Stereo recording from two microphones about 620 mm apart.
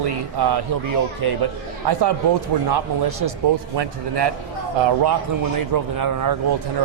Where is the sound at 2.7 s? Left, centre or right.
Right.